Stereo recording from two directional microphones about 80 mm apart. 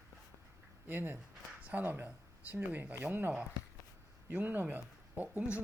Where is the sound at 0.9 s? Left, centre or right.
Right.